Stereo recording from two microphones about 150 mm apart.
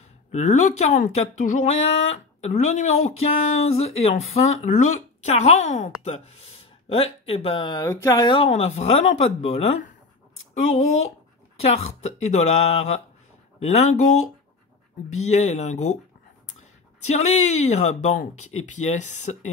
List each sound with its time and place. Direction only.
0.3 s speech: 50° left (ahead or behind); by 7.9 s 30° left (ahead or behind)
7.9 s speech: 20° left (ahead or behind)
8.3 s speech: 40° left (ahead or behind)
11.6 s speech: 45° left (ahead or behind)
17.1 s speech: 50° left (ahead or behind)